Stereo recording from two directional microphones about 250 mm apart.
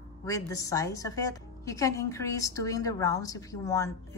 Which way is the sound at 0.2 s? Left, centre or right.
Centre.